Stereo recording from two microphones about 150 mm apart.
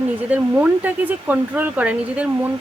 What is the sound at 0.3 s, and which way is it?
Speech, 10° right (ahead or behind).